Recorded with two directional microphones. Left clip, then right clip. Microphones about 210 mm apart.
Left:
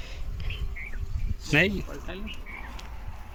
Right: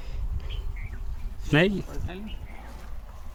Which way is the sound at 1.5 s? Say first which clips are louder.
Even; 20° right (ahead or behind).